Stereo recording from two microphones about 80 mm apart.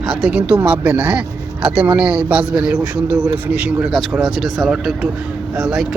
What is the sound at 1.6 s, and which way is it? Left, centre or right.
A man's voice, centre.